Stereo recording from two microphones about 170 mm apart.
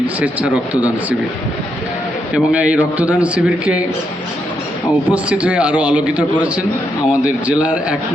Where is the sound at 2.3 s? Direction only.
5° right (ahead or behind).